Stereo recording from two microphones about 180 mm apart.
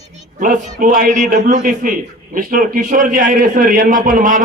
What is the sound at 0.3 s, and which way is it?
A man's voice, 45° right (ahead or behind).